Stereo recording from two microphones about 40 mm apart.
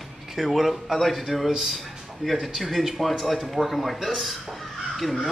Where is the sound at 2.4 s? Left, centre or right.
Centre.